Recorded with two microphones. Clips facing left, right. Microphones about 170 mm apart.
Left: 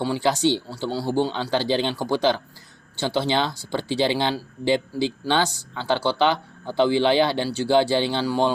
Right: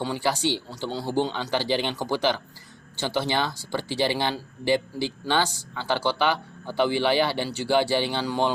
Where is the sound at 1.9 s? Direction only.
15° left (ahead or behind).